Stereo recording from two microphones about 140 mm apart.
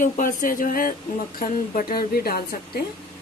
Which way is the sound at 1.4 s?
85° left.